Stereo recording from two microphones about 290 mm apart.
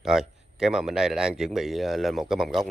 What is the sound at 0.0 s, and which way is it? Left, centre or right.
Speech, centre.